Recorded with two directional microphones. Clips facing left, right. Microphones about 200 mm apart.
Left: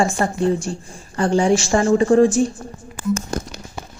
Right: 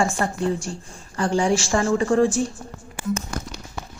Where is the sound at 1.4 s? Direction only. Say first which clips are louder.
Left 4 dB; 25° left (ahead or behind).